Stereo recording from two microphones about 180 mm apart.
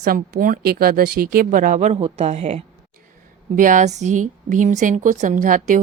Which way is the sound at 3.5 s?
45° right (ahead or behind).